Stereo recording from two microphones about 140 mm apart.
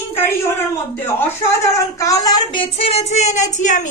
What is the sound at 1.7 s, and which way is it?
Child singing, 25° left (ahead or behind).